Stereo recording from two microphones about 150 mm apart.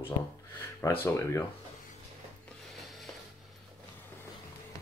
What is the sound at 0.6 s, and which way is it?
Speech, 15° left (ahead or behind).